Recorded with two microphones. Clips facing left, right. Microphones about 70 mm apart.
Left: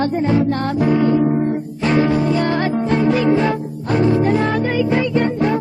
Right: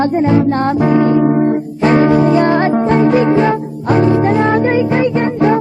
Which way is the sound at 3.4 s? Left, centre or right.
Right.